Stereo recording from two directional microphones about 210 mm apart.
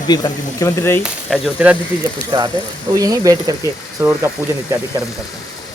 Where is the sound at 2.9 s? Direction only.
15° right (ahead or behind).